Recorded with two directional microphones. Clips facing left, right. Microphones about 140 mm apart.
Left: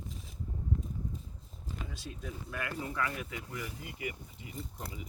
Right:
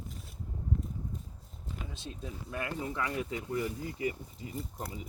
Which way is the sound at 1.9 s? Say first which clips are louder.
Right 1 dB; 25° right (ahead or behind).